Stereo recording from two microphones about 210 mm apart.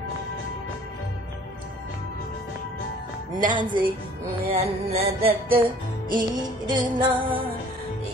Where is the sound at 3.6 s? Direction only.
40° right (ahead or behind).